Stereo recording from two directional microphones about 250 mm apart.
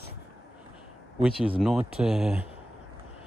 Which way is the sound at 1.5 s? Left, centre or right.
Centre.